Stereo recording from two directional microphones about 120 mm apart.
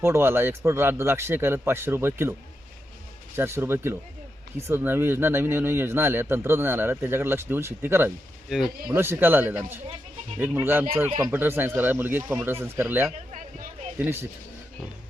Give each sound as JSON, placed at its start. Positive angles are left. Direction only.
{"t": 0.0, "sound": "speech", "side_deg": -20}
{"t": 3.3, "sound": "speech", "side_deg": -20}
{"t": 8.4, "sound": "speech", "side_deg": -5}
{"t": 9.0, "sound": "speech", "side_deg": -20}
{"t": 13.1, "sound": "a sound", "side_deg": -90}
{"t": 14.0, "sound": "speech", "side_deg": -20}